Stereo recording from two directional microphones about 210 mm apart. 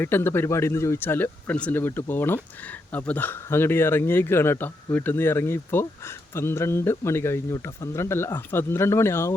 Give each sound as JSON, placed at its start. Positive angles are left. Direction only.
{"t": 0.0, "sound": "speech", "side_deg": 10}